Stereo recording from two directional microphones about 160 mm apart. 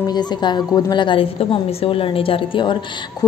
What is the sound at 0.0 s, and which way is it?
A woman's voice, 25° left (ahead or behind).